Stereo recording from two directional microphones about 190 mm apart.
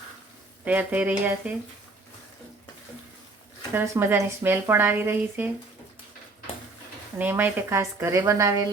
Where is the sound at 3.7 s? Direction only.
15° right (ahead or behind).